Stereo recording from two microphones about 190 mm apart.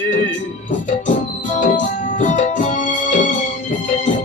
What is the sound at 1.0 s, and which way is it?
Music, 40° left (ahead or behind).